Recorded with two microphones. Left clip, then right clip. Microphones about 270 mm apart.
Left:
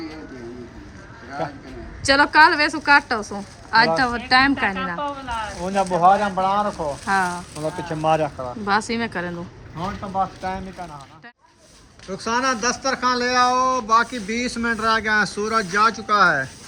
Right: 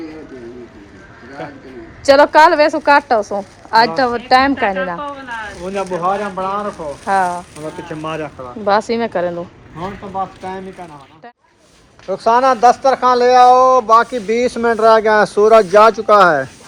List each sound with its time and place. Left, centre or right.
2.0 s a woman's voice: centre
5.6 s speech: left
7.0 s a woman's voice: centre
7.9 s speech: left
8.9 s a woman's voice: centre
12.2 s a woman's voice: centre